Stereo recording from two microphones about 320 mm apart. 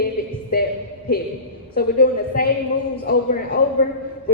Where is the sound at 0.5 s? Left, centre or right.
Left.